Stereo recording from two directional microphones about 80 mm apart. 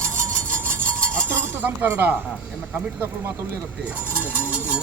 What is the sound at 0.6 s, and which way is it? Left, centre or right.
Cutlery, right.